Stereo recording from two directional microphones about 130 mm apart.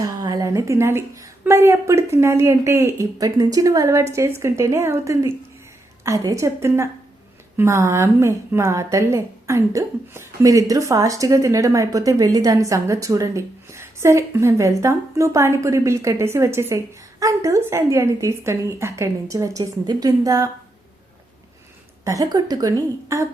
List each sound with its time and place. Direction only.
0.0 s a woman's voice: 30° right (ahead or behind)
22.0 s a woman's voice: 25° right (ahead or behind)